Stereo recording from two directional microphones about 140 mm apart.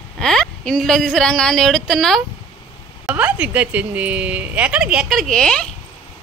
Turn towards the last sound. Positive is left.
turn(degrees=5)  # may be behind; listen again after turning